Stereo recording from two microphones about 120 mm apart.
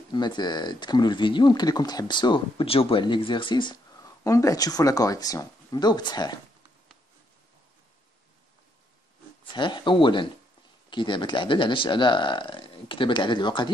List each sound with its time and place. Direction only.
0.1 s speech: 40° left (ahead or behind)
4.2 s speech: 25° left (ahead or behind)
9.5 s speech: 40° left (ahead or behind)